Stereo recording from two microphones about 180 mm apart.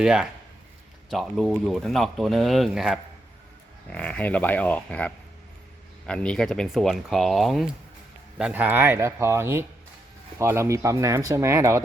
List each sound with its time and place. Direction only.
0.0 s speech: 5° right (ahead or behind)